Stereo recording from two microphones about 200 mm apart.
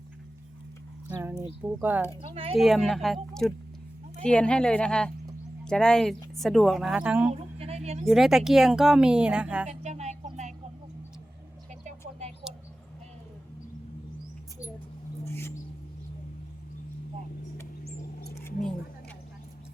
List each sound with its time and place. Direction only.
1.0 s speech: 10° right (ahead or behind)
2.3 s speech: 30° right (ahead or behind)
2.6 s speech: centre (ahead or behind)
7.3 s a sound: 30° right (ahead or behind)
8.0 s speech: centre (ahead or behind)
9.6 s music: 35° right (ahead or behind)
11.7 s vehicle: 35° right (ahead or behind)
15.2 s mouse: 10° left (ahead or behind)